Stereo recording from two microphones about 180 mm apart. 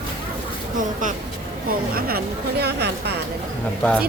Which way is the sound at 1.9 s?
55° right (ahead or behind).